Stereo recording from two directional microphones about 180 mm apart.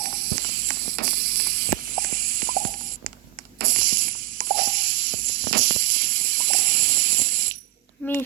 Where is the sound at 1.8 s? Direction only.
50° right (ahead or behind).